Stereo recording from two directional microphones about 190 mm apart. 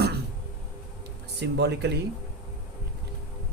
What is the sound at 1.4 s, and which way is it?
Speech, 60° right (ahead or behind).